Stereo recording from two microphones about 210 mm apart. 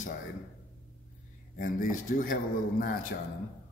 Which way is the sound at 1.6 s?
40° left (ahead or behind).